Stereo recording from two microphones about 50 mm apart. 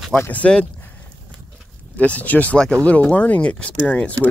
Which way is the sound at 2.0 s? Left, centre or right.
Left.